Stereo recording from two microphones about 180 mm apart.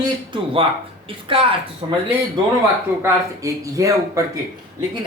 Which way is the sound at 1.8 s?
25° right (ahead or behind).